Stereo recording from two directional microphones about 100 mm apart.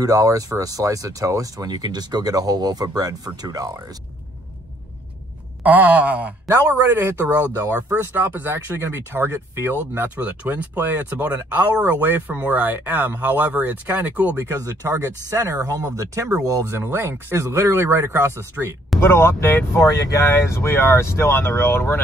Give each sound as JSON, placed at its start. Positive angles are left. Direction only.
{"t": 0.0, "sound": "speech", "side_deg": -35}
{"t": 5.6, "sound": "speech", "side_deg": -15}
{"t": 6.4, "sound": "speech", "side_deg": -25}
{"t": 14.4, "sound": "speech", "side_deg": -30}
{"t": 16.7, "sound": "speech", "side_deg": -25}
{"t": 18.9, "sound": "speech", "side_deg": 25}